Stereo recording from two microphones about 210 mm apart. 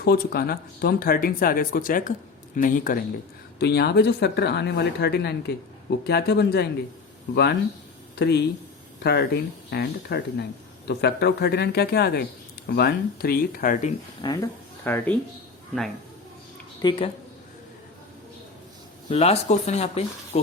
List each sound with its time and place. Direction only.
0.0 s a man's voice: 45° left (ahead or behind)
3.6 s speech: 50° left (ahead or behind)
8.2 s speech: 50° left (ahead or behind)
14.2 s speech: 20° left (ahead or behind)
14.8 s speech: 10° left (ahead or behind)
16.8 s speech: 25° left (ahead or behind)
19.0 s speech: 30° left (ahead or behind)